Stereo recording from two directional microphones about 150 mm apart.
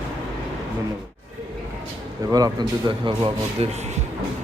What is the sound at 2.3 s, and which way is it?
Speech, 25° right (ahead or behind).